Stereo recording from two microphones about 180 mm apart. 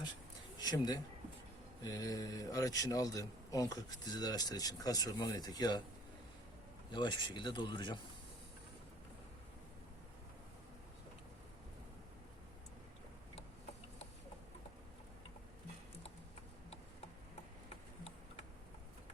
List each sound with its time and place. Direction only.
0.6 s a man's voice: 20° left (ahead or behind)
6.9 s a man's voice: 25° left (ahead or behind)